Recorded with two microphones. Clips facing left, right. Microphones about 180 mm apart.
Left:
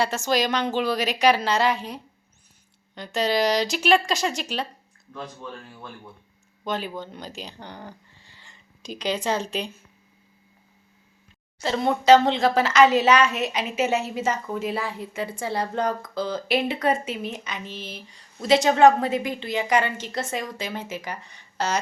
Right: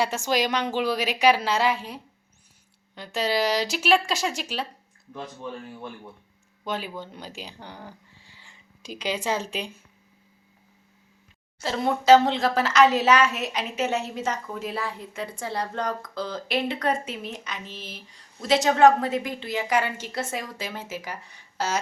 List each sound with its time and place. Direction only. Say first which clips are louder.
0.0 s a woman's voice: left 1 dB; 15° right (ahead or behind)
5.1 s a woman's voice: right 1 dB; 20° right (ahead or behind)
11.6 s speech: left 2 dB; 5° right (ahead or behind)